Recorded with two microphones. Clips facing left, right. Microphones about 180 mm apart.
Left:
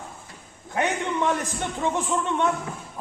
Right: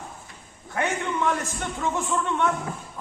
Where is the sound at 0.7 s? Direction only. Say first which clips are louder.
Left 1 dB; 20° left (ahead or behind).